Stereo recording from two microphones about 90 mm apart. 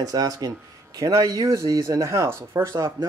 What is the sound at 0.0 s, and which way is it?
Speech, 45° right (ahead or behind).